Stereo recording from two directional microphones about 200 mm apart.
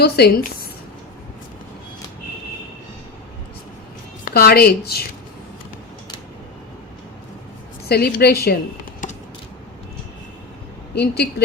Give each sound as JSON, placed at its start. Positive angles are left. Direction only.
{"t": 0.0, "sound": "a woman's voice", "side_deg": 50}
{"t": 4.3, "sound": "a woman's voice", "side_deg": 50}
{"t": 7.9, "sound": "speech", "side_deg": 55}
{"t": 10.9, "sound": "a woman's voice", "side_deg": 55}